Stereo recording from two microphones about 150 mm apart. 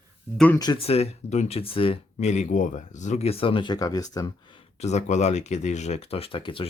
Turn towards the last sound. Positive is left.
turn(degrees=35)  # may be behind; listen again after turning